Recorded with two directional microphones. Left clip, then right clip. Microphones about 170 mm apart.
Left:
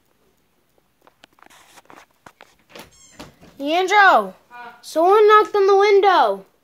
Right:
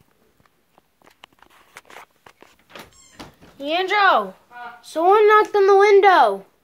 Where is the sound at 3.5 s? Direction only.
35° left (ahead or behind).